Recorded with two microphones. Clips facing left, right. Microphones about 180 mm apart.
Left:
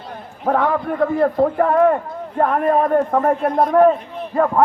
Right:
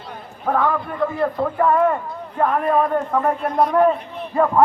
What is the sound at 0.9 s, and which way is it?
A man's voice, 50° left (ahead or behind).